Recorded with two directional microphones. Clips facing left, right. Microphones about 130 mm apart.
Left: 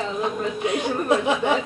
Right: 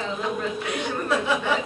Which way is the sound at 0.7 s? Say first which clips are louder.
Left 6 dB; 20° left (ahead or behind).